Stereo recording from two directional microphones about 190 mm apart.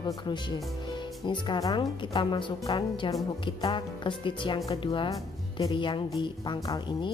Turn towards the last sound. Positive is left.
turn(degrees=20)  # may be behind; listen again after turning